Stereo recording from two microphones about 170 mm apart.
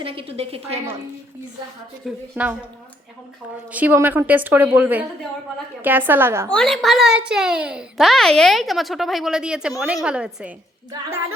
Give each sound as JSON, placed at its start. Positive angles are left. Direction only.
{"t": 0.0, "sound": "a woman's voice", "side_deg": -35}
{"t": 2.0, "sound": "a woman's voice", "side_deg": -10}
{"t": 3.7, "sound": "a woman's voice", "side_deg": -10}
{"t": 6.5, "sound": "a child's voice", "side_deg": 5}